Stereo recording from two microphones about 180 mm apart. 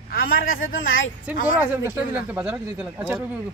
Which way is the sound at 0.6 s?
90° left.